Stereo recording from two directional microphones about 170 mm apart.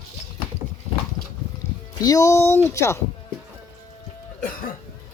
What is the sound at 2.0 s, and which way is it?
Speech, 20° left (ahead or behind).